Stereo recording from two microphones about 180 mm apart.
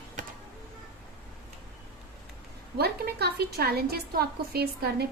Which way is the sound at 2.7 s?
65° right (ahead or behind).